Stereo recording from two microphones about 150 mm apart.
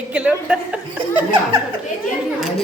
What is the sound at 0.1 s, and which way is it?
A woman's voice, 5° right (ahead or behind).